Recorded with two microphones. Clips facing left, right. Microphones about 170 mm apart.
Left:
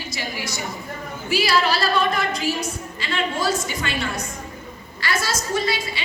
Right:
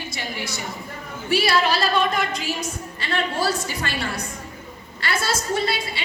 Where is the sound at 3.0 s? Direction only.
65° right (ahead or behind).